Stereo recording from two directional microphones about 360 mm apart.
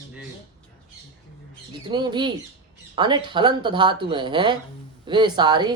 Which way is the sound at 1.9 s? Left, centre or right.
Centre.